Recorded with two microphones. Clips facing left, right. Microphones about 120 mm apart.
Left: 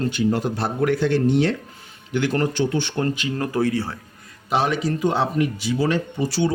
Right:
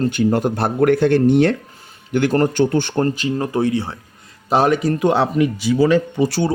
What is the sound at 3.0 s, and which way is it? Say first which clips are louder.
Speech: right 4 dB; 35° right (ahead or behind).